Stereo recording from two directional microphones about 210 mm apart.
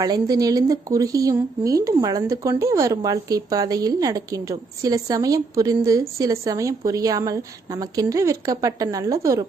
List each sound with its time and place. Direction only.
0.0 s a woman's voice: 20° right (ahead or behind)